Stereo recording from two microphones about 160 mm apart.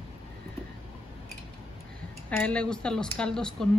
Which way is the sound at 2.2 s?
10° left (ahead or behind).